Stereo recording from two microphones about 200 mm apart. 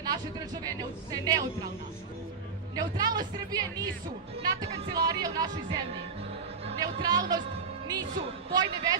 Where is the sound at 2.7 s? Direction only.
20° right (ahead or behind).